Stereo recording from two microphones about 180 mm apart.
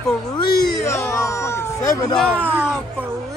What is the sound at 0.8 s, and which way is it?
Speech, 15° left (ahead or behind).